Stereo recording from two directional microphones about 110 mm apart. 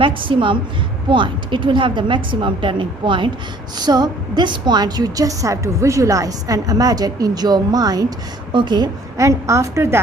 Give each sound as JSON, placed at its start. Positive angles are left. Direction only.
{"t": 0.0, "sound": "a woman's voice", "side_deg": -50}